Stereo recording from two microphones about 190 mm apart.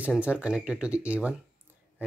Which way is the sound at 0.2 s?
5° right (ahead or behind).